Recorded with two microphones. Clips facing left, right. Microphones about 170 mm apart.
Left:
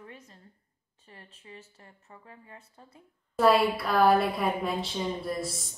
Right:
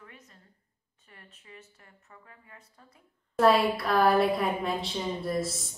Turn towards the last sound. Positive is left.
turn(degrees=0)  # may be behind; listen again after turning